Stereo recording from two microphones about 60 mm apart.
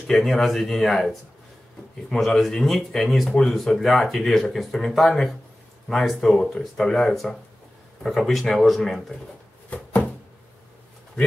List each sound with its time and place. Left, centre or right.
0.0 s speech: centre